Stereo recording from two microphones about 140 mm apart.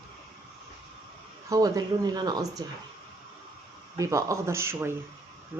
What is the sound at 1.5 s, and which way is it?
Speech, 25° right (ahead or behind).